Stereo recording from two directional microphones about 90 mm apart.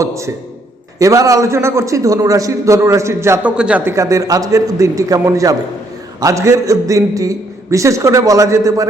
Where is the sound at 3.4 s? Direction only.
10° right (ahead or behind).